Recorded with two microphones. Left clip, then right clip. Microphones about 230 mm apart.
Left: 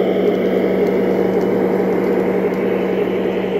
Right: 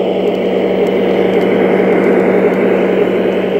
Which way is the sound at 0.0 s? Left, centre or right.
Centre.